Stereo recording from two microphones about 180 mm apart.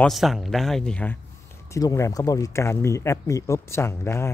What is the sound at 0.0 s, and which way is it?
Speech, centre (ahead or behind).